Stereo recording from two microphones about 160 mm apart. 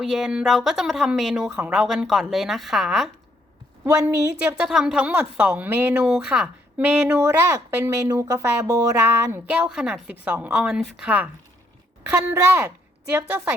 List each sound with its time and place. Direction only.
0.0 s speech: centre (ahead or behind)
3.8 s a woman's voice: 10° right (ahead or behind)
9.5 s a woman's voice: 5° right (ahead or behind)